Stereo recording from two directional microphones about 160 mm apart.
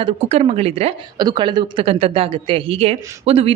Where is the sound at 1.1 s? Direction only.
25° right (ahead or behind).